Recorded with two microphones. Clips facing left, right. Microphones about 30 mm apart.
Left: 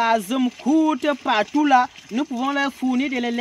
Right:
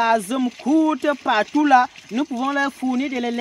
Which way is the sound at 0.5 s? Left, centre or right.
Centre.